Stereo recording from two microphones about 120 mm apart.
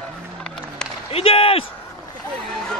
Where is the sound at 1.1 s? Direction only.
50° left (ahead or behind).